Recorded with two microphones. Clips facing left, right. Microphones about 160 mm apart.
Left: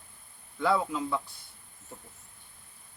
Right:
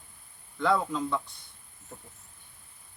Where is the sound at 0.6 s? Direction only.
5° left (ahead or behind).